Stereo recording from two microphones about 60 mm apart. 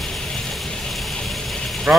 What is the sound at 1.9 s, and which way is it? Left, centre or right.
Speech, right.